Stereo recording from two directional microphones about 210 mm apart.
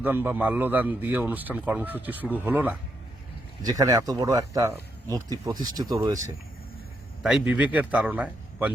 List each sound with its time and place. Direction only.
0.0 s speech: 10° right (ahead or behind)
7.2 s speech: 5° right (ahead or behind)